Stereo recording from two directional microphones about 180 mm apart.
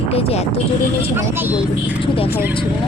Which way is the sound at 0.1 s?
35° left (ahead or behind).